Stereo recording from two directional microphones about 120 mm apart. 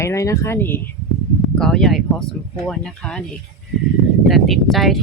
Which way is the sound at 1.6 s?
5° left (ahead or behind).